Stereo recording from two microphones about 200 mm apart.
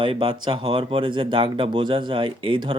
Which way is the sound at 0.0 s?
25° right (ahead or behind).